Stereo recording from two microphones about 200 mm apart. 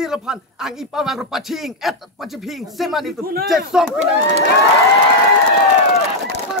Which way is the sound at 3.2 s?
50° right (ahead or behind).